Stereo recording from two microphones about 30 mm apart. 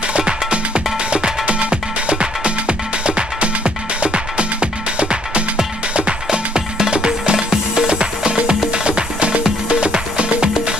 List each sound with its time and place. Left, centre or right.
1.4 s music: right